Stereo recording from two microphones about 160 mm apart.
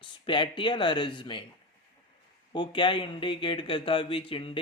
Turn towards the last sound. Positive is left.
turn(degrees=35)  # may be behind; listen again after turning